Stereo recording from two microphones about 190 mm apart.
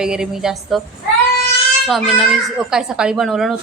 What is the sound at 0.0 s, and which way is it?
Speech, 5° right (ahead or behind).